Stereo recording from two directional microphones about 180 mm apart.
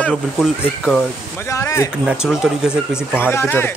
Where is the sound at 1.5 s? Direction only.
15° left (ahead or behind).